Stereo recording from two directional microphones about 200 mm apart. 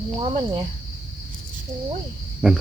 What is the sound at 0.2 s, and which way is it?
Speech, 30° right (ahead or behind).